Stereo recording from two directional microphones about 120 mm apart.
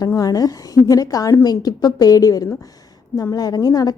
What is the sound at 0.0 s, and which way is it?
A woman's voice, 30° left (ahead or behind).